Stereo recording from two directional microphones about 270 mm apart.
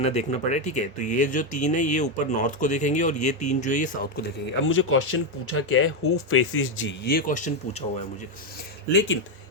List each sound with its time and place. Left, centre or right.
0.0 s speech: left
4.6 s speech: left
8.9 s speech: left